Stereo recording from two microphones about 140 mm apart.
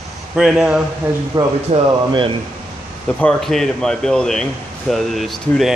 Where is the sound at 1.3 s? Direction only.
25° right (ahead or behind).